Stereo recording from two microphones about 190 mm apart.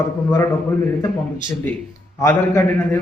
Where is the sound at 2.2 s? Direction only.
15° left (ahead or behind).